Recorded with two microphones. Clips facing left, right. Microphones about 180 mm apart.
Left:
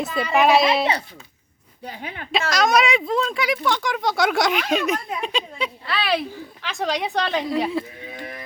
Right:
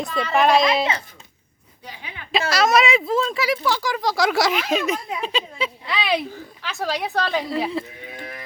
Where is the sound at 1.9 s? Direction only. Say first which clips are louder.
Left 5 dB; 50° left (ahead or behind).